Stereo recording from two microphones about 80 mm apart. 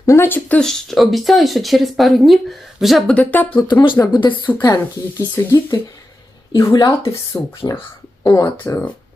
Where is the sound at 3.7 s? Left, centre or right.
Left.